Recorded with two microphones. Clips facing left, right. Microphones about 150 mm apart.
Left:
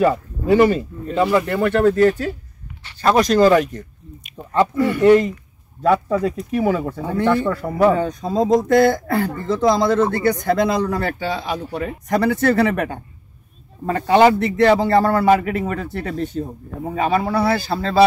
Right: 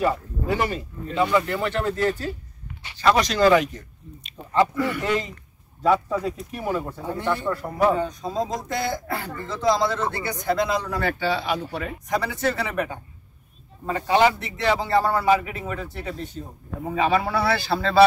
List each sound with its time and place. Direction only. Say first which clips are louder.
0.6 s speech: left 15 dB; 65° left (ahead or behind)
1.3 s speech: left 5 dB; 50° left (ahead or behind)
3.0 s speech: left 5 dB; 45° left (ahead or behind)
4.7 s speech: left 6 dB; 40° left (ahead or behind)
5.0 s speech: left 13 dB; 55° left (ahead or behind)
6.2 s speech: left 9 dB; 85° left; by 11.9 s 40° left (ahead or behind)
12.1 s speech: left 8 dB; 60° left (ahead or behind)
16.9 s speech: left 3 dB; 45° left (ahead or behind)